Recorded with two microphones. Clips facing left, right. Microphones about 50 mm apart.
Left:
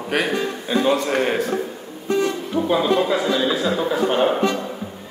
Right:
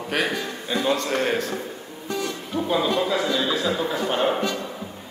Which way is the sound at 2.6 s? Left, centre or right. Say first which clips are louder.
Left 4 dB; centre.